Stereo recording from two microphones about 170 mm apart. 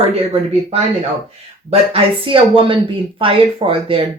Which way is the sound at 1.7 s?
35° right (ahead or behind).